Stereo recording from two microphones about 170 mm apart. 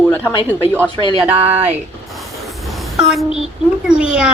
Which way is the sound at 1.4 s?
40° right (ahead or behind).